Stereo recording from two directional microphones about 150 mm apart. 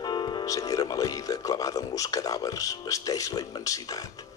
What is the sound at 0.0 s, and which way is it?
A man's voice, 30° left (ahead or behind).